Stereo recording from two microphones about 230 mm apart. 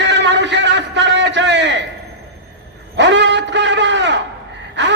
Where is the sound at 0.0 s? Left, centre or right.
Right.